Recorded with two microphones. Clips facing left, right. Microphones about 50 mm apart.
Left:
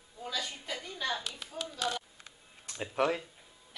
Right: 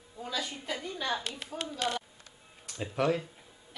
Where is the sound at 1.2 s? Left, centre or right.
Right.